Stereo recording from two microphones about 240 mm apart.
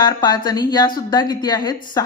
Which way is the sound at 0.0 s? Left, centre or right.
Centre.